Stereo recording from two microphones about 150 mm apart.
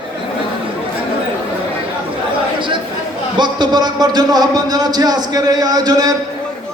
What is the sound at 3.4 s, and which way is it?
A man's voice, 30° right (ahead or behind).